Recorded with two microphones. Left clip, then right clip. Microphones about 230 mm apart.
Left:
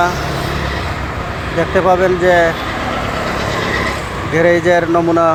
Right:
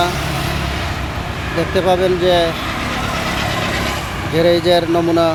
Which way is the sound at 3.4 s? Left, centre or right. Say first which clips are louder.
Left 2 dB; right.